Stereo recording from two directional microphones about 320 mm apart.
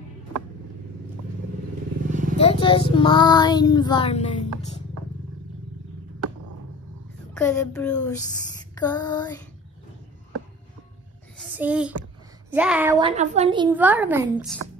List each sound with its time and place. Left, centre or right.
2.0 s vehicle: right
2.3 s speech: centre
7.3 s speech: centre
11.3 s a sound: centre
12.4 s a child's voice: centre
13.0 s a woman's voice: right; by 14.6 s centre